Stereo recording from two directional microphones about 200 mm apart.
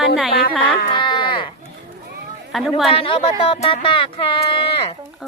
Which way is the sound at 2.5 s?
Centre (ahead or behind).